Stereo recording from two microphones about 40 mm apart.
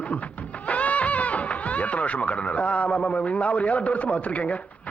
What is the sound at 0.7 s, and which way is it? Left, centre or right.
Music, left.